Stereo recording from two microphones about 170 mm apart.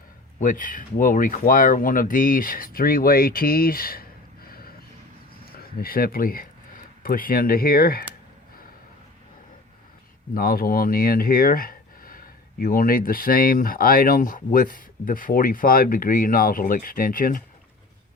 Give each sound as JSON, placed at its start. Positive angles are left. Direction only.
{"t": 0.3, "sound": "speech", "side_deg": 50}
{"t": 5.5, "sound": "speech", "side_deg": 60}
{"t": 10.3, "sound": "speech", "side_deg": 60}